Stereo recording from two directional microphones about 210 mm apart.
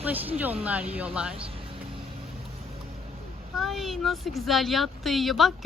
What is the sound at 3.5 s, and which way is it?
Speech, centre (ahead or behind).